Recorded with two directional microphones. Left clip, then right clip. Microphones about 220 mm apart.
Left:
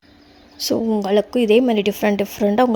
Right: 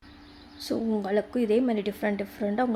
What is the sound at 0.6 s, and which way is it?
A woman's voice, 35° left (ahead or behind).